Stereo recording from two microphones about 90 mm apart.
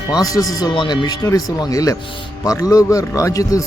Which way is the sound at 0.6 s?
55° left (ahead or behind).